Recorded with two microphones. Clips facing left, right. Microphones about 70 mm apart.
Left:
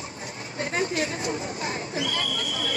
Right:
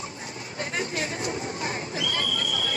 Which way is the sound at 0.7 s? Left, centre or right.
Left.